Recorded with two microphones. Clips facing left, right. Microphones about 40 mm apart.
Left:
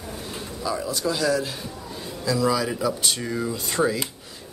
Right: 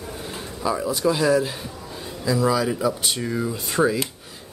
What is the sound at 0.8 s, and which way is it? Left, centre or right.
Speech, right.